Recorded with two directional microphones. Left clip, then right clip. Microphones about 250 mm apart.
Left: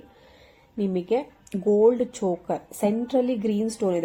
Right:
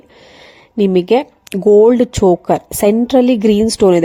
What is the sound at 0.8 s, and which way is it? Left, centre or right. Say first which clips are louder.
Speech: right 13 dB; right.